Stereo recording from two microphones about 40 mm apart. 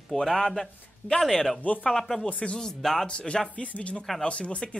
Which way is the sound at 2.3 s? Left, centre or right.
Left.